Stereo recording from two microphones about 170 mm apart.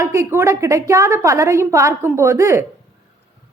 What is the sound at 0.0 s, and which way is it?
A woman's voice, 15° right (ahead or behind).